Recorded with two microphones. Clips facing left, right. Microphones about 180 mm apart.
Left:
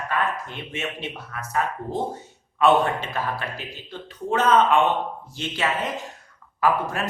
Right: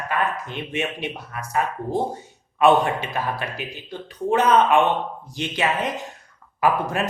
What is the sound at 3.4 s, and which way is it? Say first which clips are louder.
Speech: right 2 dB; 15° right (ahead or behind).